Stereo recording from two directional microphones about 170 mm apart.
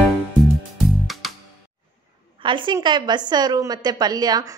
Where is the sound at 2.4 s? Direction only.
30° right (ahead or behind).